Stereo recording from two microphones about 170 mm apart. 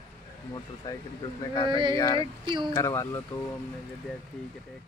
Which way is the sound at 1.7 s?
30° right (ahead or behind).